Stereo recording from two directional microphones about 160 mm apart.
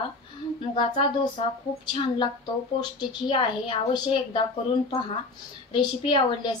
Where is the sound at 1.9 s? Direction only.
30° left (ahead or behind).